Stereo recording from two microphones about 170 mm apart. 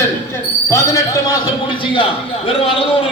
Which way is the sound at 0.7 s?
20° left (ahead or behind).